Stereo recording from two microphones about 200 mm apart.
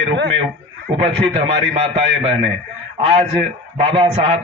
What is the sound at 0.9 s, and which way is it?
A man's voice, 35° right (ahead or behind).